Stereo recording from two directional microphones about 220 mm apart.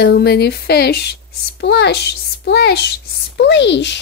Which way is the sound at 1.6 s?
50° left (ahead or behind).